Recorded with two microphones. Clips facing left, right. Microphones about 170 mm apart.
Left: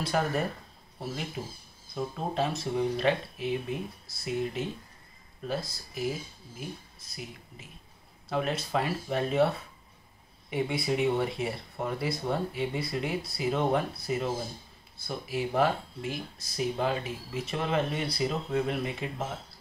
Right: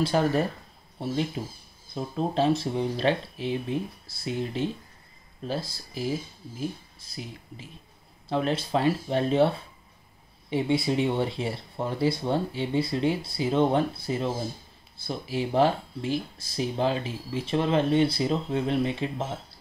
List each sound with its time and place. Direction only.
0.0 s speech: 30° right (ahead or behind)
2.1 s speech: 30° right (ahead or behind)
10.5 s speech: 30° right (ahead or behind)